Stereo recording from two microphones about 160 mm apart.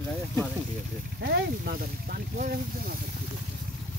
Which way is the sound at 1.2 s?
75° right (ahead or behind).